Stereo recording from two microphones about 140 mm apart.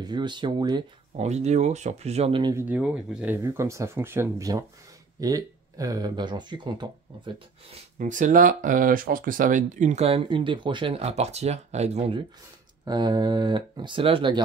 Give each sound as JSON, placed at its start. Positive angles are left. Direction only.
{"t": 0.0, "sound": "speech", "side_deg": -30}
{"t": 1.1, "sound": "speech", "side_deg": -50}
{"t": 2.5, "sound": "speech", "side_deg": -10}
{"t": 3.4, "sound": "speech", "side_deg": -20}
{"t": 8.0, "sound": "speech", "side_deg": -65}
{"t": 12.8, "sound": "speech", "side_deg": -30}